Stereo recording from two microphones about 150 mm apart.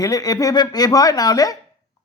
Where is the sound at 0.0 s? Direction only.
25° left (ahead or behind).